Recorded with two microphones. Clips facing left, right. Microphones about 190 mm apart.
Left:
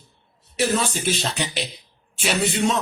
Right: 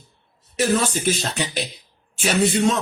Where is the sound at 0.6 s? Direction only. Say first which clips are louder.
Right 2 dB; 45° right (ahead or behind).